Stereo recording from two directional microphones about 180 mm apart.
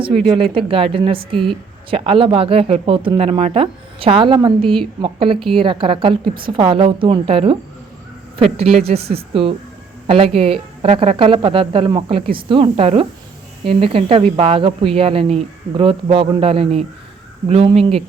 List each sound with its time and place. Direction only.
0.3 s a woman's voice: 30° right (ahead or behind)
8.5 s speech: 35° right (ahead or behind)